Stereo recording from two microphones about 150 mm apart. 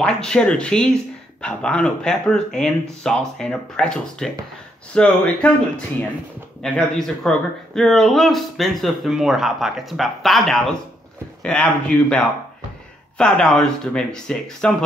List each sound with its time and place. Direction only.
0.0 s speech: 5° left (ahead or behind)
6.6 s speech: 5° left (ahead or behind)